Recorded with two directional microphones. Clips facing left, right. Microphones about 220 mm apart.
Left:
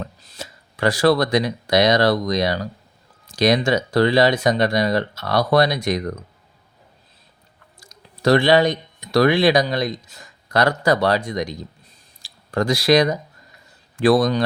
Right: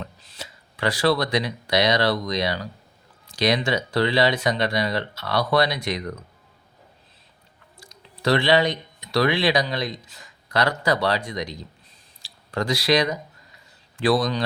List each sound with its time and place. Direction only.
0.0 s speech: 45° left (ahead or behind)
7.8 s speech: 45° left (ahead or behind)